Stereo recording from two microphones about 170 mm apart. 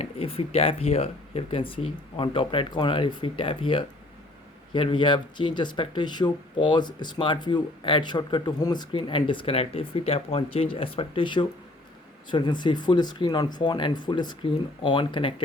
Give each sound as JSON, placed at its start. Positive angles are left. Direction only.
{"t": 0.0, "sound": "speech", "side_deg": 35}